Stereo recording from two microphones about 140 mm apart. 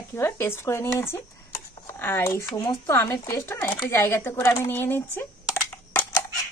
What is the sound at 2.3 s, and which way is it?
Speech, 25° left (ahead or behind).